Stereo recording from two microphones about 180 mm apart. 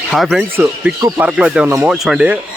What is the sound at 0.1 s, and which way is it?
Speech, centre (ahead or behind).